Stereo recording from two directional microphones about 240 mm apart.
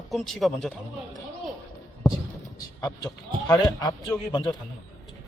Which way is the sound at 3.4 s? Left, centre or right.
Centre.